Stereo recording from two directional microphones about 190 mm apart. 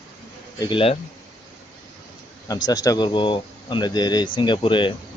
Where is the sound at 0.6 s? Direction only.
25° left (ahead or behind).